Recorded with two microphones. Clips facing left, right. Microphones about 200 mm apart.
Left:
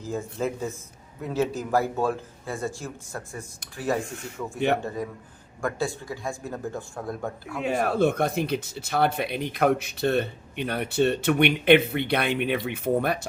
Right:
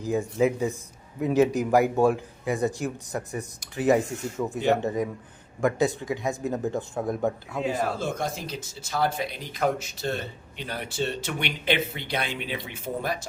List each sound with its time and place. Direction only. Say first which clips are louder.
0.0 s a man's voice: right 5 dB; 15° right (ahead or behind)
7.6 s speech: left 5 dB; 60° left (ahead or behind)